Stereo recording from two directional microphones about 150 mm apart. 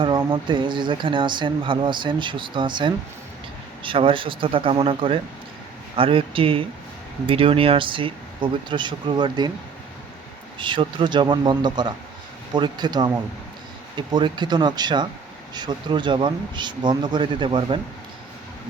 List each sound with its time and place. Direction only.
0.3 s speech: 30° right (ahead or behind)
10.6 s speech: 35° right (ahead or behind)